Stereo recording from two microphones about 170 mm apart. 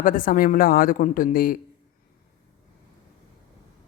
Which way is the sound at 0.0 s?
55° left (ahead or behind).